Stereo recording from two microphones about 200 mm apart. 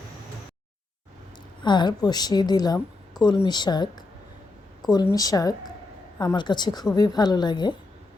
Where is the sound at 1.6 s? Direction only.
20° left (ahead or behind).